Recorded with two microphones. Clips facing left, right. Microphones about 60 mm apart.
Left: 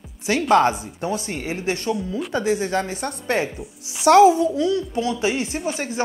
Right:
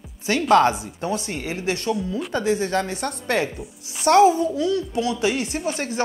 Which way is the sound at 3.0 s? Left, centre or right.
Left.